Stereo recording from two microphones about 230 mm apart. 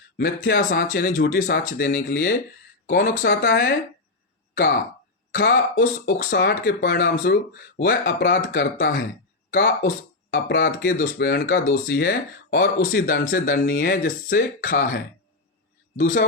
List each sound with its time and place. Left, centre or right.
0.2 s speech: left
5.3 s speech: left